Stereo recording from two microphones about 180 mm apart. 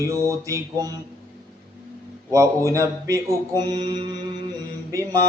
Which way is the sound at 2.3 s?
20° right (ahead or behind).